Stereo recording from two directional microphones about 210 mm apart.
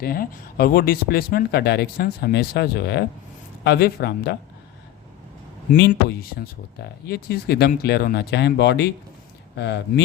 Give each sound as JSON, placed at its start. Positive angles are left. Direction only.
{"t": 0.0, "sound": "speech", "side_deg": 45}
{"t": 5.9, "sound": "speech", "side_deg": 45}